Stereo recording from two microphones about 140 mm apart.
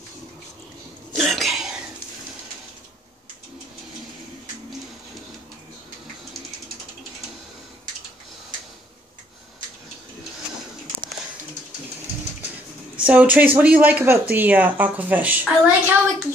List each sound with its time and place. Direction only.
1.1 s cough: centre (ahead or behind)
13.0 s speech: 10° right (ahead or behind)